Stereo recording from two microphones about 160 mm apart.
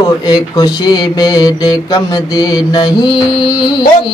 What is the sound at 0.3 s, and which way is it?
Mantra, 25° left (ahead or behind).